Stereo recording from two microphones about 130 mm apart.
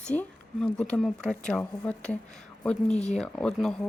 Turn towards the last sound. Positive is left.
turn(degrees=5)  # may be behind; listen again after turning